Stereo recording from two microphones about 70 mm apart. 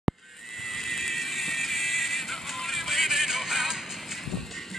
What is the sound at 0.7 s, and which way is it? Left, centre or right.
Music, centre.